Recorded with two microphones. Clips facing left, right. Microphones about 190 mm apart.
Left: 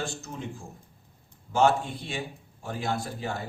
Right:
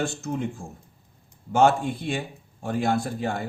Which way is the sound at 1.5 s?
50° right (ahead or behind).